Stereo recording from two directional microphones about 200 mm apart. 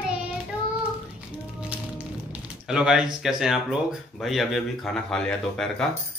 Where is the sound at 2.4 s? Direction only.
5° right (ahead or behind).